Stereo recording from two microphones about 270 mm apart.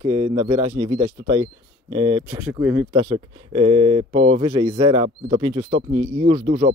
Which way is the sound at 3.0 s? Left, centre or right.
Centre.